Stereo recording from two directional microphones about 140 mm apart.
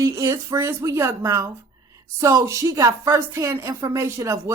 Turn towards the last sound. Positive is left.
turn(degrees=-20)  # may be behind; listen again after turning